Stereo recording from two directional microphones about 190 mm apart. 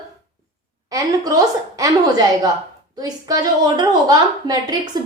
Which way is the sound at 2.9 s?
20° right (ahead or behind).